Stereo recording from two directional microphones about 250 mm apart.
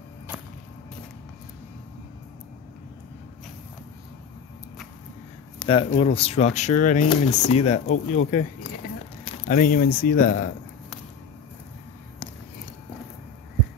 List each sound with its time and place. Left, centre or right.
5.6 s a sound: left
5.9 s speech: left
7.8 s speech: left
9.2 s speech: left